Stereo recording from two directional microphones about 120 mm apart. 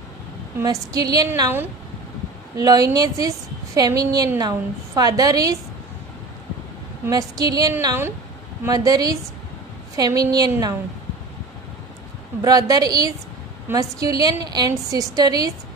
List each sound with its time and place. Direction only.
0.6 s a woman's voice: 30° right (ahead or behind)
2.5 s a woman's voice: 30° right (ahead or behind)
7.1 s a woman's voice: 30° right (ahead or behind)
12.4 s a woman's voice: 30° right (ahead or behind)